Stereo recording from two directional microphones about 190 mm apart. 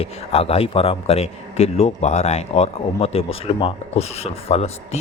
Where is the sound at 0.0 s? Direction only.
30° left (ahead or behind).